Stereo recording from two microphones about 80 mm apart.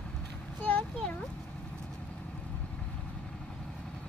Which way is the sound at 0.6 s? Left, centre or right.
Centre.